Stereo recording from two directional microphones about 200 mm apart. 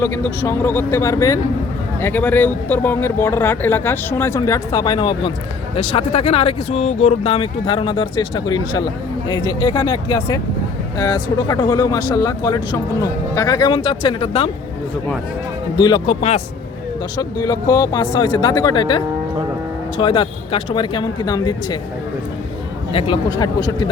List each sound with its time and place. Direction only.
0.0 s speech: 15° left (ahead or behind)
15.8 s speech: 20° left (ahead or behind)
17.2 s speech: 20° left (ahead or behind)
22.9 s speech: 25° left (ahead or behind)